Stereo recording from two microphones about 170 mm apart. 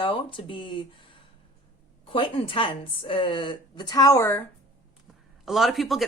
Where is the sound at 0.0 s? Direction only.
30° left (ahead or behind).